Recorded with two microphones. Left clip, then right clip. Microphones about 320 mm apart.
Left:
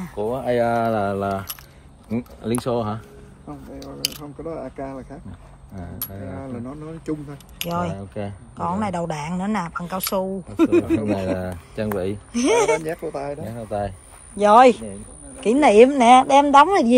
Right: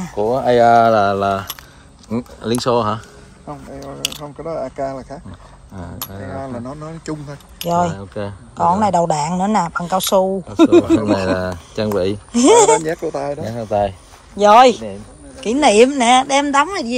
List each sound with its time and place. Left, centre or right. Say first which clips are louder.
0.2 s speech: right 8 dB; centre
4.1 s speech: right 6 dB; right
7.1 s speech: right 1 dB; right
7.6 s speech: right 9 dB; centre
12.7 s speech: right 7 dB; right
14.3 s a woman's voice: right 4 dB; centre